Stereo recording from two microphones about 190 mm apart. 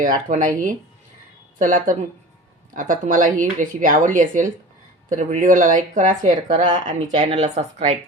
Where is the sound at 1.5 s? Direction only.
45° right (ahead or behind).